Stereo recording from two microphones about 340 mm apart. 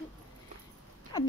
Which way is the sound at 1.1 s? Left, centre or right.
Centre.